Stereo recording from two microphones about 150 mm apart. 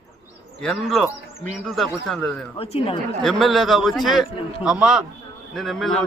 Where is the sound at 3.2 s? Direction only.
Centre (ahead or behind).